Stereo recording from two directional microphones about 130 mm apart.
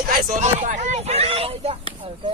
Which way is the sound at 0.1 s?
80° right.